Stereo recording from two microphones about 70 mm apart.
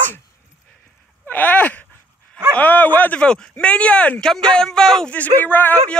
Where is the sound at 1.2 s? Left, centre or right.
Left.